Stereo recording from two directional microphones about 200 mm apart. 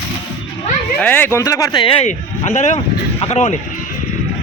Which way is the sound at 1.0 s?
10° left (ahead or behind).